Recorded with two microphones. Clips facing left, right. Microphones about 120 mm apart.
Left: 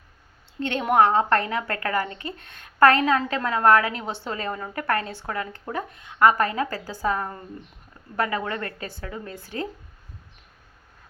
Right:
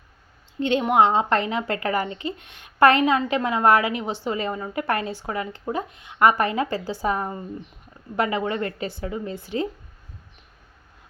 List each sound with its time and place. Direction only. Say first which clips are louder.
0.6 s a woman's voice: right 1 dB; 15° right (ahead or behind)